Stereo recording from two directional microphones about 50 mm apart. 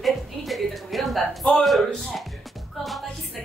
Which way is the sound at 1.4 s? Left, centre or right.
Centre.